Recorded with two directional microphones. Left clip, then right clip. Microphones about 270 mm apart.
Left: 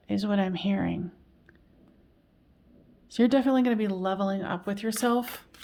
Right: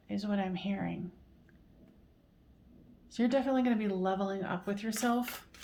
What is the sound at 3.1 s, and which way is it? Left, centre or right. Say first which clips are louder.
Speech: left 7 dB; left.